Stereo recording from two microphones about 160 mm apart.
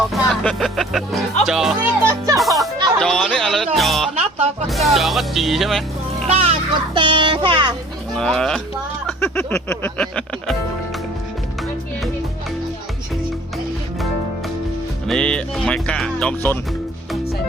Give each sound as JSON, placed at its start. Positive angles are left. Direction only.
{"t": 0.1, "sound": "music", "side_deg": 0}
{"t": 1.5, "sound": "speech", "side_deg": -5}
{"t": 2.0, "sound": "music", "side_deg": -15}
{"t": 2.4, "sound": "music", "side_deg": 0}
{"t": 3.0, "sound": "a sound", "side_deg": 0}
{"t": 3.8, "sound": "music", "side_deg": 0}
{"t": 4.1, "sound": "music", "side_deg": -45}
{"t": 4.7, "sound": "speech", "side_deg": 0}
{"t": 6.2, "sound": "a child's voice", "side_deg": -40}
{"t": 8.1, "sound": "speech", "side_deg": 5}
{"t": 9.2, "sound": "music", "side_deg": 15}
{"t": 15.0, "sound": "speech", "side_deg": 5}